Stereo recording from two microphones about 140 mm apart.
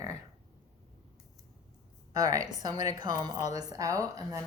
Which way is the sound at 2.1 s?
25° right (ahead or behind).